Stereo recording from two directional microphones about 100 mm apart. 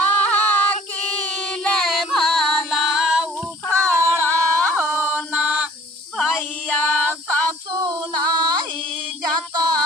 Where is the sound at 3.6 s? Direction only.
30° right (ahead or behind).